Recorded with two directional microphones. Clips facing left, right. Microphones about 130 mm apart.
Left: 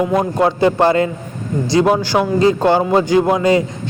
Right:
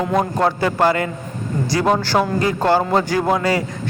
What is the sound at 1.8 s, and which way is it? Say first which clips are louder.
A man's voice: left 2 dB; 10° left (ahead or behind).